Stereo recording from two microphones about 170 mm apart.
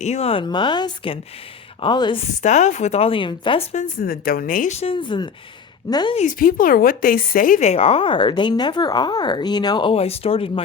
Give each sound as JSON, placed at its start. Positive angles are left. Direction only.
{"t": 0.0, "sound": "speech", "side_deg": 40}
{"t": 2.4, "sound": "speech", "side_deg": 45}
{"t": 4.0, "sound": "a woman's voice", "side_deg": 60}
{"t": 4.7, "sound": "speech", "side_deg": 35}
{"t": 6.1, "sound": "speech", "side_deg": 50}